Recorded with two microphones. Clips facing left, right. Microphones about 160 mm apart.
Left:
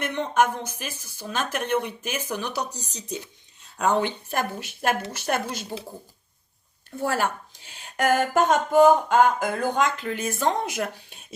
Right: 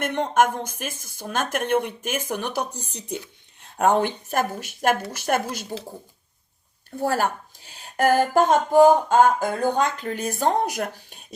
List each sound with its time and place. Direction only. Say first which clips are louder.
0.0 s speech: right 2 dB; 55° right (ahead or behind)
6.9 s speech: right 2 dB; 40° right (ahead or behind)